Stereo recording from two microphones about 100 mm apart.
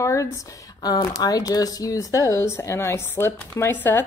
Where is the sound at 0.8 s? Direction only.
40° left (ahead or behind).